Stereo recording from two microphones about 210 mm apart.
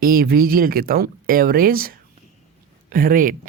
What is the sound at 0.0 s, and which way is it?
Speech, 45° right (ahead or behind).